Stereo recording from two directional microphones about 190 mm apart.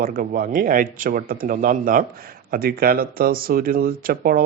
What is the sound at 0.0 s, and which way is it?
Speech, 45° right (ahead or behind).